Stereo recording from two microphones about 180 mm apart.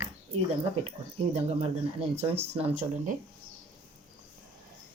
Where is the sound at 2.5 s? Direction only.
40° right (ahead or behind).